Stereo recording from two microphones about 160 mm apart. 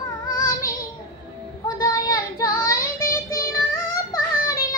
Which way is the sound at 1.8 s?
25° left (ahead or behind).